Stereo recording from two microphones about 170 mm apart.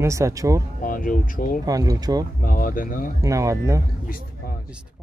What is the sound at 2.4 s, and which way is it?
Speech, 55° left (ahead or behind).